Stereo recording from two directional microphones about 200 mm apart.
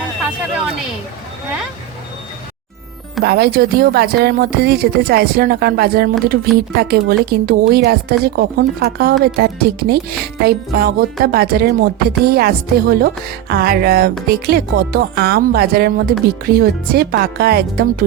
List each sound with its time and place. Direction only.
3.2 s speech: 50° right (ahead or behind)